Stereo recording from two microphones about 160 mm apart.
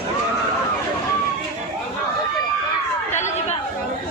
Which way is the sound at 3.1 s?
45° left (ahead or behind).